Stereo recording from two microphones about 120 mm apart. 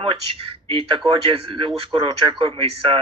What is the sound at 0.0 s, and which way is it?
Speech, 50° right (ahead or behind).